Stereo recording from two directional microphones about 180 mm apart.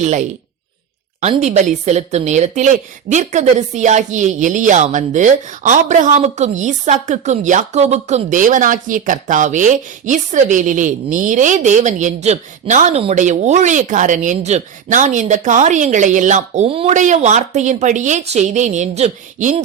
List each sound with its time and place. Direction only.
0.0 s a woman's voice: 40° right (ahead or behind)